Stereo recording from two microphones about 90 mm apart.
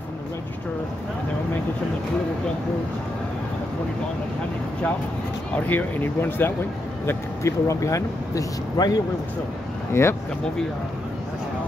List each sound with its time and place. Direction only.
5.7 s speech: 20° left (ahead or behind)
7.1 s speech: 35° left (ahead or behind)
10.0 s speech: 30° left (ahead or behind)